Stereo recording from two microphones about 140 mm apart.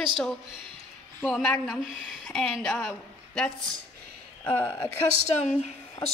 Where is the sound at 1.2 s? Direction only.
5° left (ahead or behind).